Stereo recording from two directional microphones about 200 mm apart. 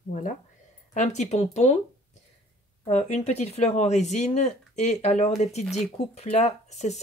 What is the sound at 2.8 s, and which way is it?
Speech, 35° left (ahead or behind).